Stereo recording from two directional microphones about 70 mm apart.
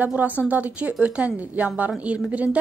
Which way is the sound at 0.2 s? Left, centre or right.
Right.